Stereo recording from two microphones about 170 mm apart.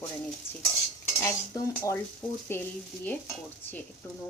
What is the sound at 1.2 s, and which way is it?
Cutlery, 20° left (ahead or behind).